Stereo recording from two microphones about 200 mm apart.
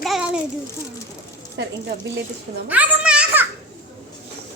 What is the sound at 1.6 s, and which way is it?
Speech, 60° right (ahead or behind).